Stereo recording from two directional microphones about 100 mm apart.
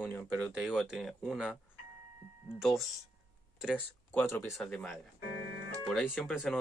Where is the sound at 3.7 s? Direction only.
20° left (ahead or behind).